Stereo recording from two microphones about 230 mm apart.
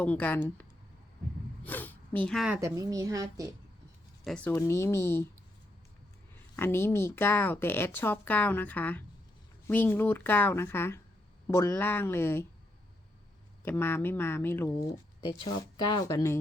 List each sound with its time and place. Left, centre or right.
0.0 s a woman's voice: centre
1.6 s speech: centre
2.6 s a woman's voice: centre
4.2 s a woman's voice: centre
6.6 s a woman's voice: centre
13.7 s a woman's voice: centre